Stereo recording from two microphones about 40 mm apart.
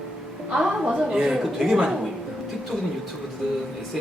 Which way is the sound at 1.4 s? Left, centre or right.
Centre.